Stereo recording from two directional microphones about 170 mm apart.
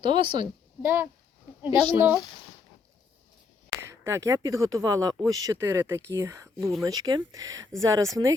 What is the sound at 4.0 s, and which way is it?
Speech, 20° right (ahead or behind).